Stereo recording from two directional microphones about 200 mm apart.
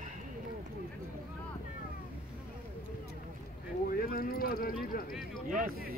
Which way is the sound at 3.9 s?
45° left (ahead or behind).